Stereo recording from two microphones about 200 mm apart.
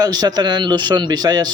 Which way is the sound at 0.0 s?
20° right (ahead or behind).